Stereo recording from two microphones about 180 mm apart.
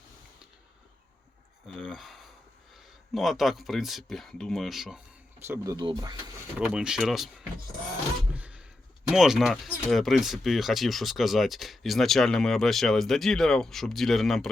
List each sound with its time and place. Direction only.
1.6 s speech: centre (ahead or behind)
5.4 s speech: 15° right (ahead or behind)
6.7 s speech: 5° right (ahead or behind)
8.4 s a sound: 5° right (ahead or behind)
9.0 s speech: centre (ahead or behind)